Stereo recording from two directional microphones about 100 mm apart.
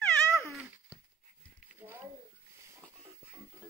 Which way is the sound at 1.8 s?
25° right (ahead or behind).